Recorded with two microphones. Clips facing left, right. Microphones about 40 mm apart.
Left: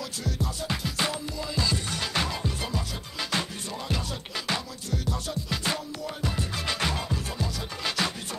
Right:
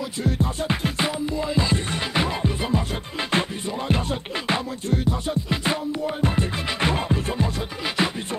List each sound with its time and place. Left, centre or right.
0.2 s music: right
0.9 s music: right